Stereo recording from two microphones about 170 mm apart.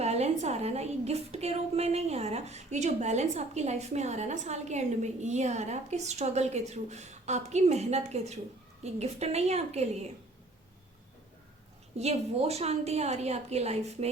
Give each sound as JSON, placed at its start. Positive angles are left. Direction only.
{"t": 0.0, "sound": "a woman's voice", "side_deg": -40}
{"t": 11.9, "sound": "a woman's voice", "side_deg": -40}